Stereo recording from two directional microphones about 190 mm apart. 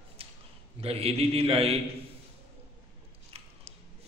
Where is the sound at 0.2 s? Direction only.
30° right (ahead or behind).